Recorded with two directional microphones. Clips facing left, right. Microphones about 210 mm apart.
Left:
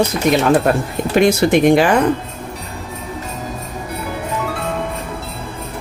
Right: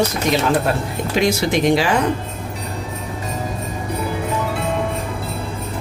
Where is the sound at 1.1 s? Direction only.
55° left (ahead or behind).